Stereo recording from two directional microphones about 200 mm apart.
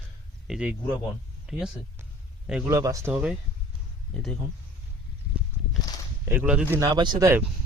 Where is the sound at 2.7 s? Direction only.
15° right (ahead or behind).